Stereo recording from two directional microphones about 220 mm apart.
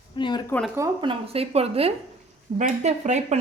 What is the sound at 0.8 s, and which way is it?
Speech, 25° right (ahead or behind).